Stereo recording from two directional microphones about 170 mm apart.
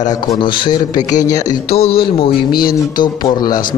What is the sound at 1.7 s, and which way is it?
Speech, 35° left (ahead or behind).